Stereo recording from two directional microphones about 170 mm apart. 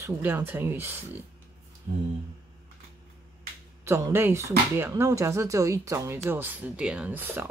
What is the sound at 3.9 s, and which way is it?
Speech, 15° right (ahead or behind).